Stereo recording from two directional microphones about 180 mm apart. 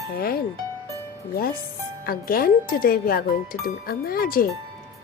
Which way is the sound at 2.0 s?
55° left (ahead or behind).